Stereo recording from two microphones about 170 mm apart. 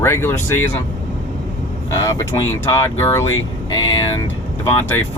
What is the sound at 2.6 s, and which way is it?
Speech, 15° left (ahead or behind).